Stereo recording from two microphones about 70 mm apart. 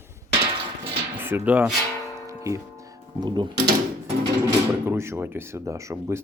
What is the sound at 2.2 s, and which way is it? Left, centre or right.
Music, right.